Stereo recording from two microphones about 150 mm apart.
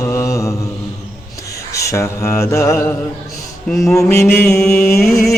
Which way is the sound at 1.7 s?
20° left (ahead or behind).